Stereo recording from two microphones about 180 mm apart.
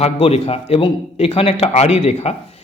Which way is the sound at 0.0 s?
35° left (ahead or behind).